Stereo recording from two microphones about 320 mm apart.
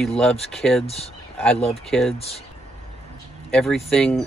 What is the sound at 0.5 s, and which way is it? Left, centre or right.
Speech, centre.